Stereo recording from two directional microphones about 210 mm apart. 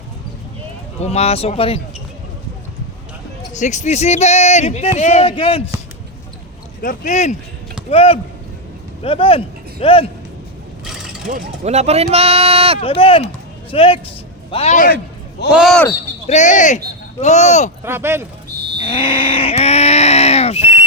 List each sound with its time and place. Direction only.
0.9 s speech: 30° left (ahead or behind)
3.6 s speech: 35° left (ahead or behind)
6.8 s speech: 35° left (ahead or behind)
10.8 s mechanisms: 5° right (ahead or behind)
11.6 s speech: 30° right (ahead or behind)
12.8 s speech: 25° left (ahead or behind)
15.5 s speech: centre (ahead or behind)
16.2 s speech: 35° left (ahead or behind)
17.8 s speech: 10° right (ahead or behind)
18.9 s a sound: 25° left (ahead or behind)
20.6 s a sound: 10° right (ahead or behind)